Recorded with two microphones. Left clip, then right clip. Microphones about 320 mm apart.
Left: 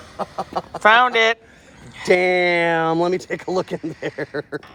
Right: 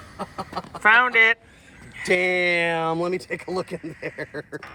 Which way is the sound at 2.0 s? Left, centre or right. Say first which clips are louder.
Left 4 dB; left.